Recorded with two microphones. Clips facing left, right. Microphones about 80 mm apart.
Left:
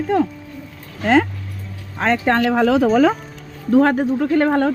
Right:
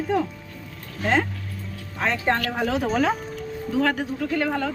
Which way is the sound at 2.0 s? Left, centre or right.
Left.